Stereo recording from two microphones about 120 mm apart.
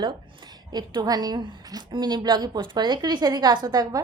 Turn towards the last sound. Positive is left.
turn(degrees=-35)  # may be behind; listen again after turning